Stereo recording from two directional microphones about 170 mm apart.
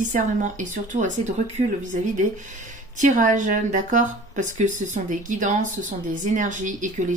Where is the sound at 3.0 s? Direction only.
45° right (ahead or behind).